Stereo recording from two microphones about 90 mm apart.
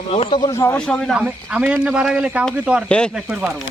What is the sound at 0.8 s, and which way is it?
Speech, 10° left (ahead or behind).